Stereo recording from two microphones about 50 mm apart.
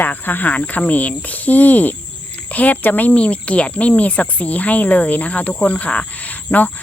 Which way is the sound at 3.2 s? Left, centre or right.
Left.